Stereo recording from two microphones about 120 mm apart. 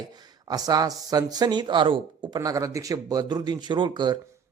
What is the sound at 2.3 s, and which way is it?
Speech, 25° right (ahead or behind).